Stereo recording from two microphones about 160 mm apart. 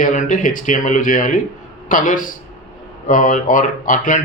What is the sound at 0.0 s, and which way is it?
Speech, 50° left (ahead or behind).